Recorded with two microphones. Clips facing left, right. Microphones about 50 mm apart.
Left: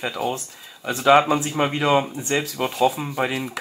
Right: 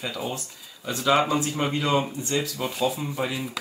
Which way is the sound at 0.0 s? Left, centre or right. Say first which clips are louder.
Left 5 dB; left.